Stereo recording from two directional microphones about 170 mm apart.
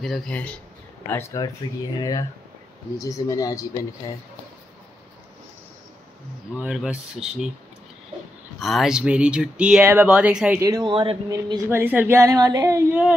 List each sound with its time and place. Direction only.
0.0 s speech: centre (ahead or behind); by 3.8 s 20° left (ahead or behind)
6.6 s speech: 5° right (ahead or behind)
8.5 s speech: centre (ahead or behind)
10.9 s speech: 30° right (ahead or behind)
11.8 s speech: 10° right (ahead or behind)